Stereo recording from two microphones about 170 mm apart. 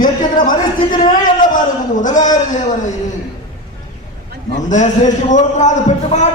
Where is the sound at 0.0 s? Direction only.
50° left (ahead or behind).